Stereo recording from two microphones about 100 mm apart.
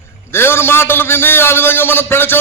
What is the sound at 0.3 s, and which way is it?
A man's voice, 25° left (ahead or behind).